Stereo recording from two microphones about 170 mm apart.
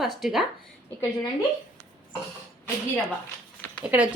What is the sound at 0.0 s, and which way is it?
Speech, centre (ahead or behind).